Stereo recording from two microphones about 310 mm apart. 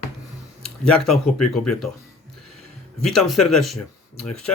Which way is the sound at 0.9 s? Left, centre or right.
Centre.